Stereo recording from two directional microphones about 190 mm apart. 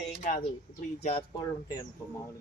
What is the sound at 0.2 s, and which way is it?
Speech, 45° left (ahead or behind).